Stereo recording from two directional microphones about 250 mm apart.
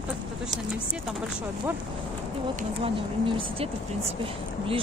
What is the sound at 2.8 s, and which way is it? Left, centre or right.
Speech, right.